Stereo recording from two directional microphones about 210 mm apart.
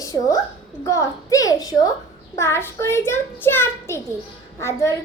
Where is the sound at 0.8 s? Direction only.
15° left (ahead or behind).